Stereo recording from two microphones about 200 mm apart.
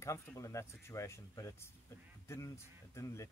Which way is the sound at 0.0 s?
15° left (ahead or behind).